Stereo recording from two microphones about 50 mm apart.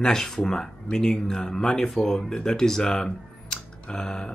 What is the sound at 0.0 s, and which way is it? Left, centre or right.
Speech, centre.